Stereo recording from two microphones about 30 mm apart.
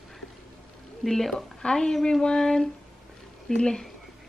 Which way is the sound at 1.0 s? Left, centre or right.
Centre.